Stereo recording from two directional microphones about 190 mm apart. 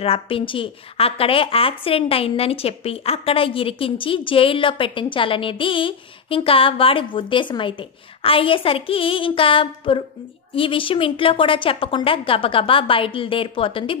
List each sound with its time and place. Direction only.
0.0 s a woman's voice: 30° left (ahead or behind)